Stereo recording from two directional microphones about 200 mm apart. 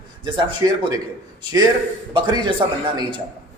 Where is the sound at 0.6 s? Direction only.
15° right (ahead or behind).